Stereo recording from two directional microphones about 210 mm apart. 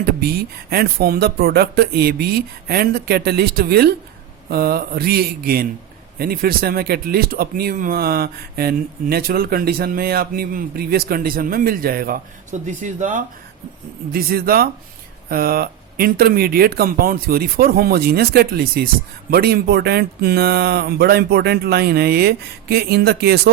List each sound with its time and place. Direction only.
0.0 s speech: 45° right (ahead or behind)